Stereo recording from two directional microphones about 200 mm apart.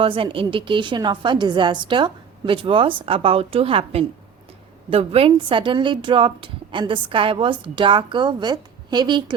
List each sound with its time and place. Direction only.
0.0 s a woman's voice: 25° right (ahead or behind)